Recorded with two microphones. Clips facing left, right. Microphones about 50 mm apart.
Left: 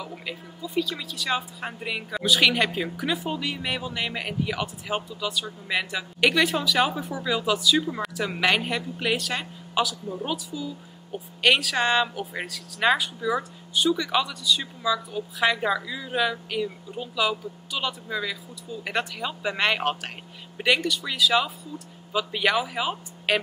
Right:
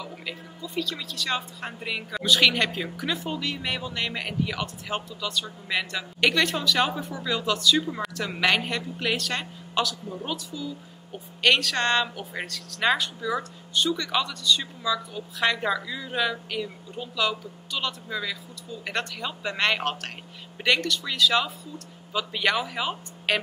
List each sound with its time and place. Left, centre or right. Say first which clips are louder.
0.0 s speech: left 1 dB; centre